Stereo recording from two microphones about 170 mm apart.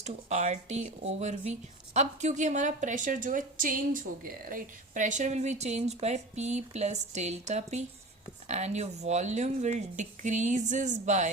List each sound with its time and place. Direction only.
0.0 s a woman's voice: 45° right (ahead or behind)